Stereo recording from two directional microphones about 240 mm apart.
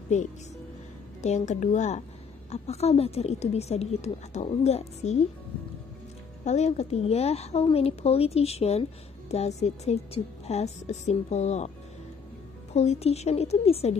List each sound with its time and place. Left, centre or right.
1.2 s a woman's voice: left
6.4 s a woman's voice: left
12.7 s a woman's voice: left